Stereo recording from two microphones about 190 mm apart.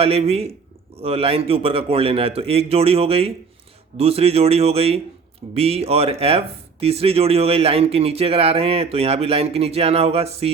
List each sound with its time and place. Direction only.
0.0 s speech: 30° right (ahead or behind)